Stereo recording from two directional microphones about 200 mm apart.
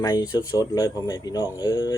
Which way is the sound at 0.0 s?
20° left (ahead or behind).